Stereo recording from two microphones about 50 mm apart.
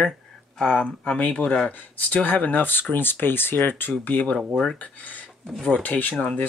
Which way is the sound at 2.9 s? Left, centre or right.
Left.